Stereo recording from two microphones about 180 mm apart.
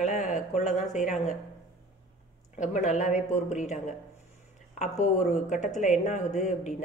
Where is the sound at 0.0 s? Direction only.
40° left (ahead or behind).